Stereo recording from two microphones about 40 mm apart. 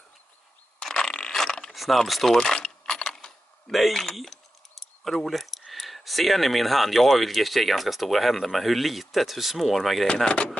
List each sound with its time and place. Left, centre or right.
0.8 s mechanisms: centre
1.3 s a sound: centre
1.7 s a sound: centre
2.0 s speech: centre
2.3 s keys jangling: centre
3.7 s speech: centre
10.2 s speech: left